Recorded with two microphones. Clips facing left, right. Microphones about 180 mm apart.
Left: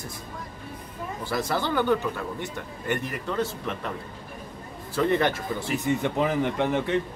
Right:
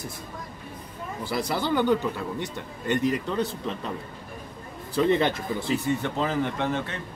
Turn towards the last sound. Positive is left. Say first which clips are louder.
# left 4 dB
turn(degrees=15)  # may be behind; listen again after turning